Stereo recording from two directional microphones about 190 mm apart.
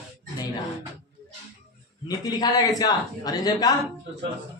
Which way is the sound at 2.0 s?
20° left (ahead or behind).